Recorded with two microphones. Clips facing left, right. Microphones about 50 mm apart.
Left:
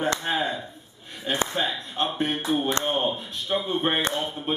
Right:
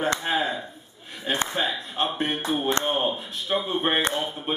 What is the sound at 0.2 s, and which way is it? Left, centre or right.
Speech, centre.